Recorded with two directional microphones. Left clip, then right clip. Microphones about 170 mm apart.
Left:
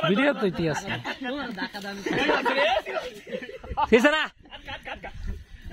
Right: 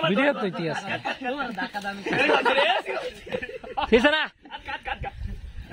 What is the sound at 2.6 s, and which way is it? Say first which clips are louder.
Speech: right 1 dB; 10° right (ahead or behind).